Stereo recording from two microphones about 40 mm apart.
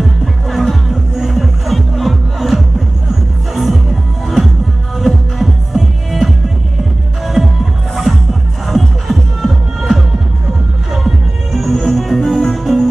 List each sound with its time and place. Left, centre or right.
0.2 s music: centre
7.9 s music: centre